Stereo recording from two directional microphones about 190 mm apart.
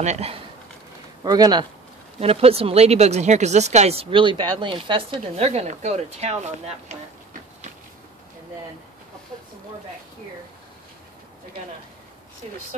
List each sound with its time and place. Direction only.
0.0 s speech: 35° right (ahead or behind)
1.2 s speech: 20° right (ahead or behind)
2.1 s speech: 30° right (ahead or behind)